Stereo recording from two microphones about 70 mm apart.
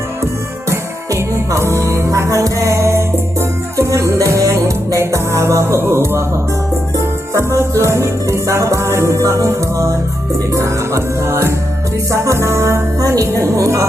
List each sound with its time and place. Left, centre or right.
0.7 s music: right
13.0 s music: right